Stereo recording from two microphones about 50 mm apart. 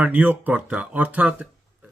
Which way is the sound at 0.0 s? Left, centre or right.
Right.